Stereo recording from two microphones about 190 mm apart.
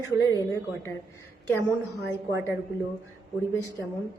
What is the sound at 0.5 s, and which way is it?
Speech, 15° left (ahead or behind).